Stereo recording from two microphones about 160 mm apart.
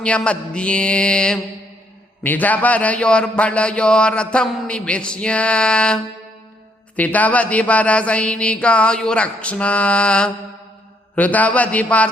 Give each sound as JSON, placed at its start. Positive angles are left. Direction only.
{"t": 0.0, "sound": "a man's voice", "side_deg": 5}